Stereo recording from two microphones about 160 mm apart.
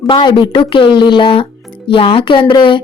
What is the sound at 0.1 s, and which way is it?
Speech, 30° left (ahead or behind).